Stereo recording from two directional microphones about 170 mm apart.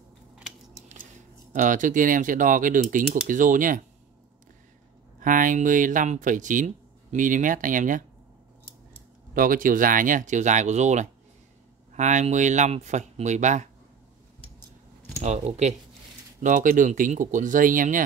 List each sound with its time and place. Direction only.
1.5 s speech: 50° right (ahead or behind)
5.2 s speech: 50° right (ahead or behind)
9.3 s speech: 55° right (ahead or behind)
15.2 s speech: 40° right (ahead or behind)